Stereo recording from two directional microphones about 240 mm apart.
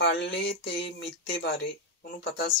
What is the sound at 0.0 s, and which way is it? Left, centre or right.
Speech, left.